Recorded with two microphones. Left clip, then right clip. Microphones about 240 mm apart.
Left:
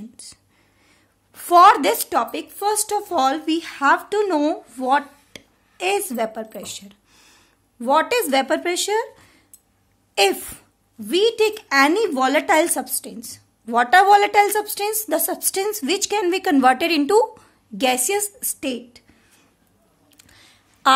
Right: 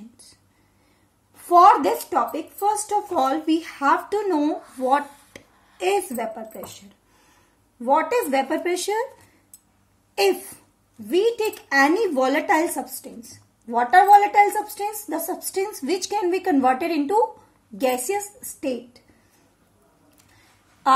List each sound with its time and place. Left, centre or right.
1.5 s a woman's voice: left
7.8 s a woman's voice: left
10.1 s a woman's voice: left